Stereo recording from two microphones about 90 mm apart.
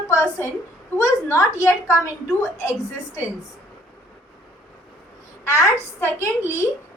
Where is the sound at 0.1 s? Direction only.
35° left (ahead or behind).